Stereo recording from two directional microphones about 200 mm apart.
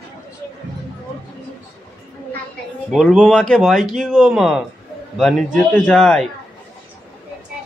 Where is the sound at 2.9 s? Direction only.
Centre (ahead or behind).